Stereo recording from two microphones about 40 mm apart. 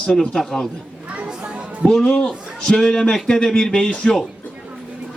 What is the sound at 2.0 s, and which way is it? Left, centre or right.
A man's voice, left.